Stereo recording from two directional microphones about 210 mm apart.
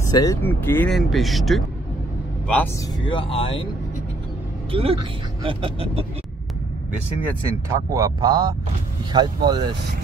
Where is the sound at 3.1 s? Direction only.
25° left (ahead or behind).